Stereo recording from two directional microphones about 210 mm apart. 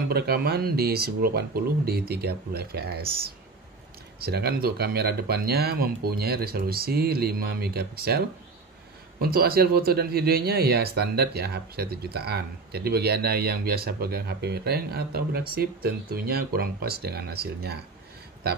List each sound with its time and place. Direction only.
0.1 s speech: 50° right (ahead or behind)
4.2 s speech: 50° right (ahead or behind)
9.2 s speech: 45° right (ahead or behind)